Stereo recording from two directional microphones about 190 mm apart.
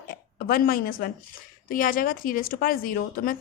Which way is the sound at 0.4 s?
50° left (ahead or behind).